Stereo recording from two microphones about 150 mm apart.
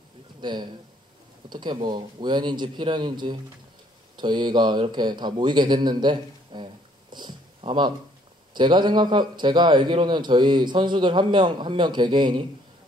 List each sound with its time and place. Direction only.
0.4 s a man's voice: 30° right (ahead or behind)